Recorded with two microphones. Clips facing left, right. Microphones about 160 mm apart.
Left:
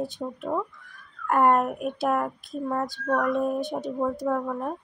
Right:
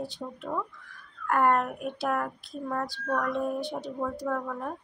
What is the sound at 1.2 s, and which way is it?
Speech, 20° left (ahead or behind).